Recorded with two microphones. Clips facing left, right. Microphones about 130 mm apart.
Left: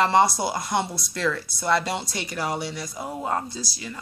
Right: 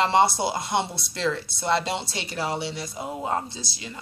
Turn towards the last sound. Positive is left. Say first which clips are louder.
# left 3 dB
turn(degrees=-25)  # may be behind; listen again after turning